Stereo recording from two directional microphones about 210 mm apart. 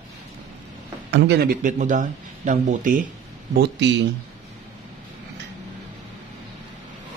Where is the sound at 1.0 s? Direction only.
55° right (ahead or behind); by 3.0 s 40° right (ahead or behind).